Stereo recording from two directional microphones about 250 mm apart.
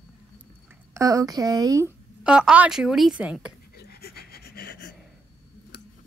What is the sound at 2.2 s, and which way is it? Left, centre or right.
A woman's voice, centre.